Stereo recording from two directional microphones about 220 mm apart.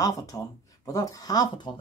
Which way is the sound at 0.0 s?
15° left (ahead or behind).